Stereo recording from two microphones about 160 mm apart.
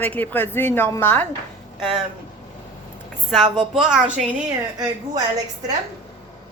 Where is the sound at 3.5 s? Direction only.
Centre (ahead or behind).